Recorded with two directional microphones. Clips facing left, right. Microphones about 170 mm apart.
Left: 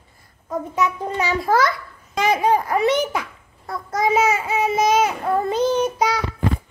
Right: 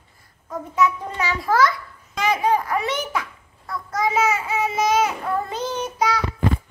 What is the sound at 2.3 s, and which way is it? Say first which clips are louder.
Speech: left 2 dB; 35° left (ahead or behind).